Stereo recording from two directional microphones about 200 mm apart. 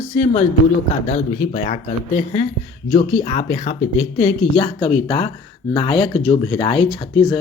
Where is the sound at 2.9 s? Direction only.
30° left (ahead or behind).